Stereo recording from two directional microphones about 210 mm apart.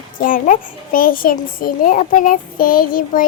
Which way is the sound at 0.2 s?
40° left (ahead or behind).